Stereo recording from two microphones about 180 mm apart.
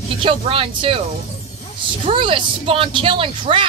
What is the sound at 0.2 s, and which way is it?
Speech, 30° right (ahead or behind).